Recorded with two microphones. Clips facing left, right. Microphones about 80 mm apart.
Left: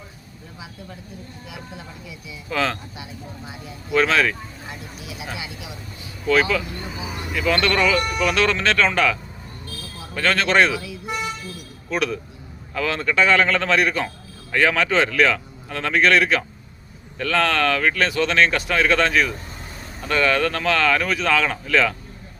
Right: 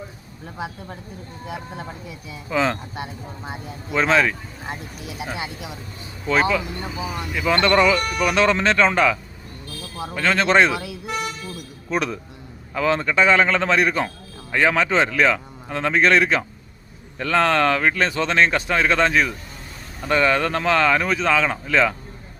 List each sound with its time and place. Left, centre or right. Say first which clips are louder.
0.6 s speech: right 7 dB; right
2.5 s speech: right 2 dB; centre
2.9 s speech: right 4 dB; right
3.9 s speech: even; right
4.6 s speech: right 8 dB; right
6.2 s speech: left 1 dB; right
6.8 s speech: right 3 dB; centre
7.3 s speech: right 2 dB; centre
10.2 s speech: right 1 dB; centre
11.9 s speech: even; right